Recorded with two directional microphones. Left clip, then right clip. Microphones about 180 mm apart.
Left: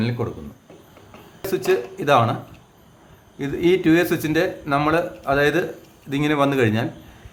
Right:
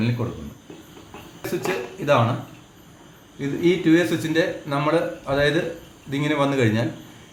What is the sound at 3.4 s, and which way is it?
Speech, 50° left (ahead or behind).